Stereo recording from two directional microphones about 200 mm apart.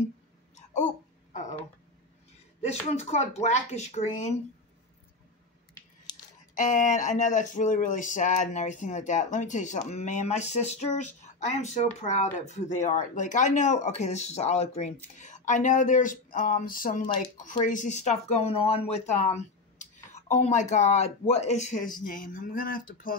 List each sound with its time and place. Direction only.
1.3 s a sound: 35° left (ahead or behind)
2.9 s speech: 35° left (ahead or behind)
6.5 s speech: 40° left (ahead or behind)